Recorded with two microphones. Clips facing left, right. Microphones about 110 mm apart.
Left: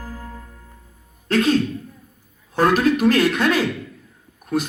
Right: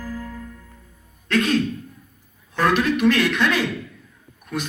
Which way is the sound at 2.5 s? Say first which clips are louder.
Left 3 dB; 40° left (ahead or behind).